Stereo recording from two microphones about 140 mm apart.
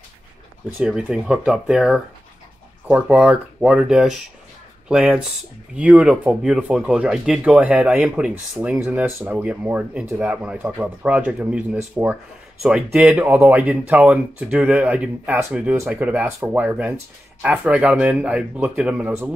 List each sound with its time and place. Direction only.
0.7 s speech: 10° right (ahead or behind)